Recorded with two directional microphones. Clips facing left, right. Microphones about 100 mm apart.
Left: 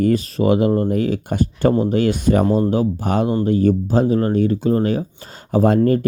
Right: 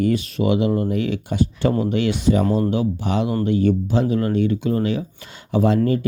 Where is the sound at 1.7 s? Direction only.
30° left (ahead or behind).